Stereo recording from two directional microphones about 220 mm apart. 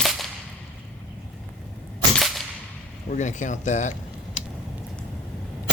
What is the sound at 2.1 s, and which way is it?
Whip, centre (ahead or behind).